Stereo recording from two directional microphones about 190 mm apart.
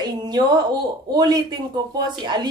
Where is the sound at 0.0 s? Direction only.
20° right (ahead or behind).